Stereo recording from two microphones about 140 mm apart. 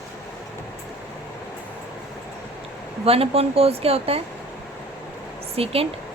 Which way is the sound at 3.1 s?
45° right (ahead or behind).